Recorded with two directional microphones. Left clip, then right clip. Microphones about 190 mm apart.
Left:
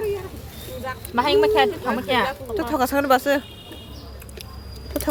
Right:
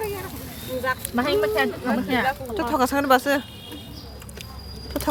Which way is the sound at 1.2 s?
60° left (ahead or behind).